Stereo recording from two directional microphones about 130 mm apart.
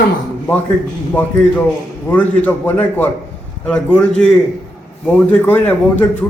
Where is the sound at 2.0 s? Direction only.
15° left (ahead or behind).